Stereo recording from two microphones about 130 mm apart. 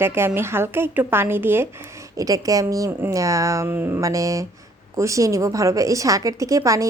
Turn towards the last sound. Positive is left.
turn(degrees=-25)  # may be behind; listen again after turning